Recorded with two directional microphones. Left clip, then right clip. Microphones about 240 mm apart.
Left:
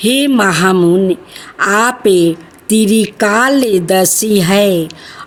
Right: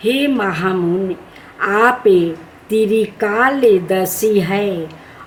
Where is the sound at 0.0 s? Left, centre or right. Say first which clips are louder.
Left 5 dB; left.